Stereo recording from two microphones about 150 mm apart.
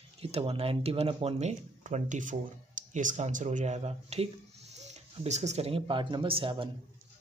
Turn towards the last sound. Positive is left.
turn(degrees=-35)  # may be behind; listen again after turning